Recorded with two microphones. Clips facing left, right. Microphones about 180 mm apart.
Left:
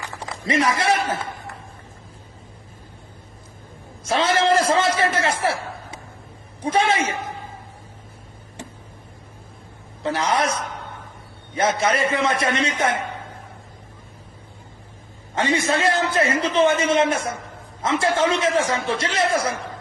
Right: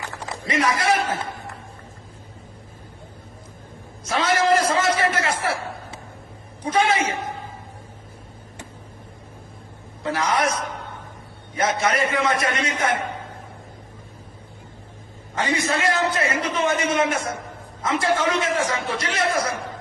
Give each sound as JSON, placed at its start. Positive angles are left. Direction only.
{"t": 0.4, "sound": "a man's voice", "side_deg": 30}
{"t": 4.0, "sound": "a sound", "side_deg": 25}
{"t": 6.6, "sound": "a man's voice", "side_deg": 30}
{"t": 10.0, "sound": "a man's voice", "side_deg": 30}
{"t": 15.4, "sound": "a man's voice", "side_deg": 30}